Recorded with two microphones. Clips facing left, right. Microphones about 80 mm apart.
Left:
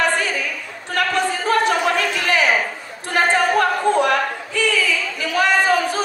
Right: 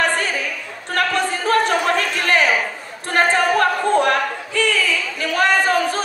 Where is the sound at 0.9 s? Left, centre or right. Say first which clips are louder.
Even; right.